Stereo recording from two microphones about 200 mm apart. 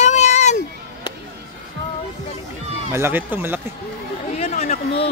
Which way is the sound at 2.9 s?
10° right (ahead or behind).